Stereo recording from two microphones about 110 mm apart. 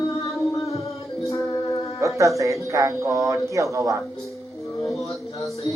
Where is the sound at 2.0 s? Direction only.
30° right (ahead or behind).